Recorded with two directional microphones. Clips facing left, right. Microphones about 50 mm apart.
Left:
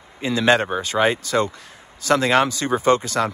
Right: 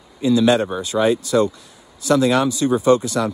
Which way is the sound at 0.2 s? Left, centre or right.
Left.